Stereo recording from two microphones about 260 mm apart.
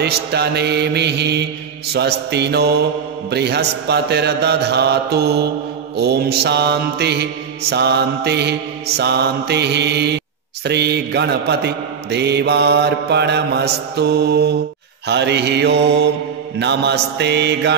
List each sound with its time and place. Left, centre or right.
0.0 s mantra: right